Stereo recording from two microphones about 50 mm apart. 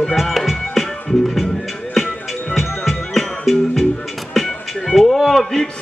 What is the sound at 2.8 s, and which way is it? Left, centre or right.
Music, centre.